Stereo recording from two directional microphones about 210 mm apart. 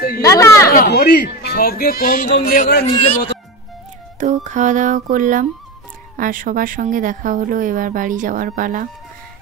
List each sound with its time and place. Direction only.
0.2 s speech: 15° left (ahead or behind)
0.7 s a man's voice: 50° left (ahead or behind)
4.2 s speech: 35° right (ahead or behind)